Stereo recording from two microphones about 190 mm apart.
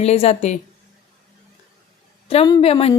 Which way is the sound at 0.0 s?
35° left (ahead or behind).